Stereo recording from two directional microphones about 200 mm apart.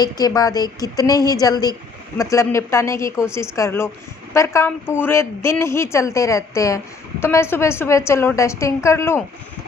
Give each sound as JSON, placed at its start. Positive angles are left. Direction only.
{"t": 0.0, "sound": "a woman's voice", "side_deg": 20}